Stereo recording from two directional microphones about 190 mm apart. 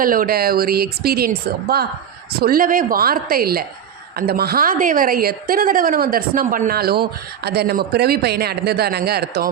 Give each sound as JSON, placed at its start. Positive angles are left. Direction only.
{"t": 0.0, "sound": "a woman's voice", "side_deg": -50}